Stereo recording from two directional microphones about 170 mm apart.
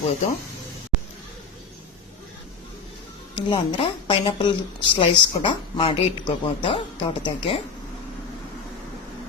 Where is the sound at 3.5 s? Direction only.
30° left (ahead or behind).